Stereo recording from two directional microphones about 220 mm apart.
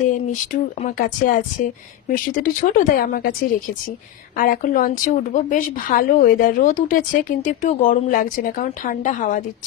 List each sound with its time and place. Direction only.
0.5 s a woman's voice: 35° left (ahead or behind)
4.4 s a woman's voice: 40° left (ahead or behind)